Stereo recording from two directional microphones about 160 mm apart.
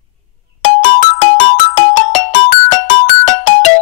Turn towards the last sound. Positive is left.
turn(degrees=45)  # may be behind; listen again after turning